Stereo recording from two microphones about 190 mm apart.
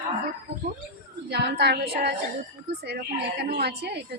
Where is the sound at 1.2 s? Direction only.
60° right (ahead or behind).